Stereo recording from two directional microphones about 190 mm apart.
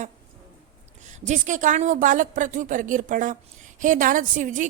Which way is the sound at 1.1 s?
40° right (ahead or behind).